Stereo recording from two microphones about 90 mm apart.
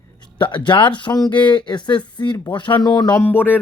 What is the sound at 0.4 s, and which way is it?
Speech, 65° left (ahead or behind).